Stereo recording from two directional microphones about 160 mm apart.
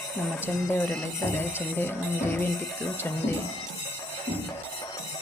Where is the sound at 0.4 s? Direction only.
15° left (ahead or behind).